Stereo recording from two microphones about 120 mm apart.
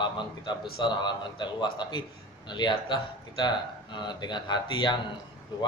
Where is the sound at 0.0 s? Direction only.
40° left (ahead or behind).